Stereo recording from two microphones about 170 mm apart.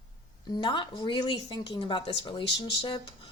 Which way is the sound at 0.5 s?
25° left (ahead or behind).